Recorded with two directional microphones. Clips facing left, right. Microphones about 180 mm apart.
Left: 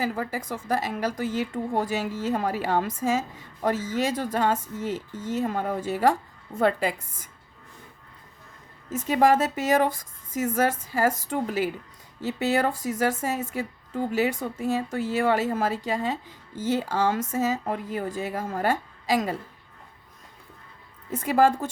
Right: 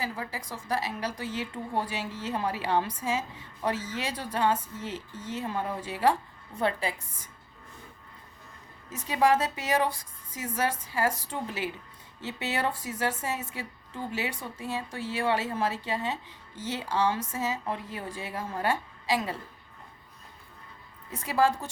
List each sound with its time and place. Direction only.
0.0 s a woman's voice: 50° left (ahead or behind)
8.9 s a woman's voice: 50° left (ahead or behind)
21.1 s a woman's voice: 50° left (ahead or behind)